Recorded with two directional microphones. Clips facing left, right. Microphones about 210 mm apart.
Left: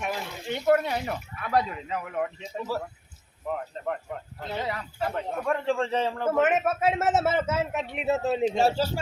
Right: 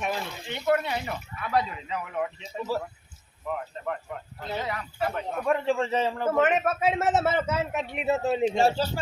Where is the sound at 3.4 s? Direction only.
35° left (ahead or behind).